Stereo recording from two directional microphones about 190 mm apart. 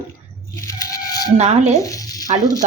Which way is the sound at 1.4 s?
35° right (ahead or behind).